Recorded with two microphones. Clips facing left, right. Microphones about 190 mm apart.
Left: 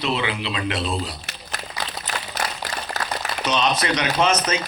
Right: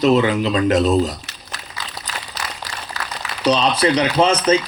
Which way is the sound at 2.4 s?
50° left (ahead or behind).